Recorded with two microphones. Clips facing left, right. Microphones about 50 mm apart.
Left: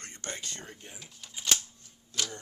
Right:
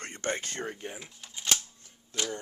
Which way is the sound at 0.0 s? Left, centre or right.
Right.